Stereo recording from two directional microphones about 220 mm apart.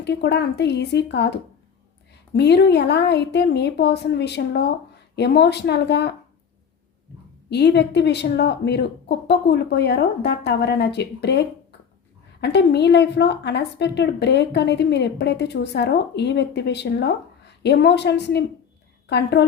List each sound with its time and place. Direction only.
0.0 s a woman's voice: 50° left (ahead or behind)
2.3 s a woman's voice: 50° left (ahead or behind)
7.5 s a woman's voice: 50° left (ahead or behind)